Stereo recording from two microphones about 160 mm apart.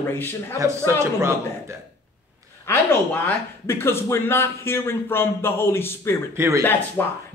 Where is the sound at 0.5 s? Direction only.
15° right (ahead or behind).